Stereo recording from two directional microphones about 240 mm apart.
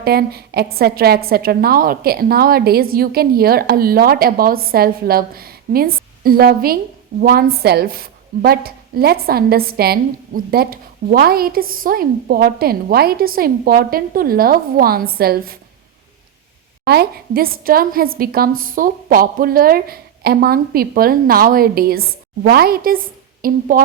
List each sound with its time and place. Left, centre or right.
0.0 s a woman's voice: right
16.8 s a woman's voice: right